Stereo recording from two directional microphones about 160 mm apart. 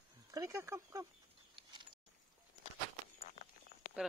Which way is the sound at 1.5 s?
30° right (ahead or behind).